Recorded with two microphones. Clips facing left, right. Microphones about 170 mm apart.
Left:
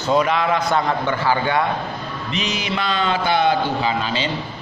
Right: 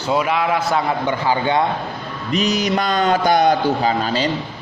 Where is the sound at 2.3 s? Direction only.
40° right (ahead or behind).